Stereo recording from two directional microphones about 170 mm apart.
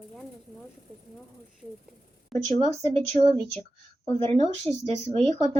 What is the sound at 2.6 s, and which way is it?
Speech, 35° right (ahead or behind).